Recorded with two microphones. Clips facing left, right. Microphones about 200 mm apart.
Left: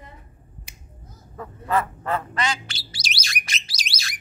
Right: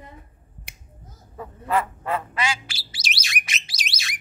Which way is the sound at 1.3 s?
10° right (ahead or behind).